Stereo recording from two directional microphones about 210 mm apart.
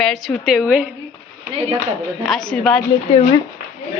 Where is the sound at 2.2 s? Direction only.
Centre (ahead or behind).